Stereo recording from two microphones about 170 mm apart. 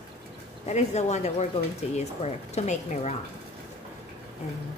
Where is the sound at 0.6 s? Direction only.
40° left (ahead or behind).